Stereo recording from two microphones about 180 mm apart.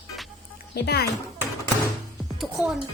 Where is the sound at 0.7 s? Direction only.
65° left (ahead or behind).